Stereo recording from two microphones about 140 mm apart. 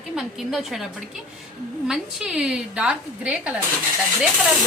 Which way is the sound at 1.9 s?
5° right (ahead or behind).